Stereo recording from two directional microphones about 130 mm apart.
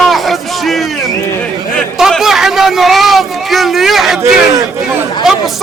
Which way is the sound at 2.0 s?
Centre (ahead or behind).